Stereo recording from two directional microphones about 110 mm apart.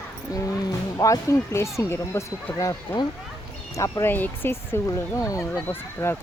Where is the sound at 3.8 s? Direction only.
25° left (ahead or behind).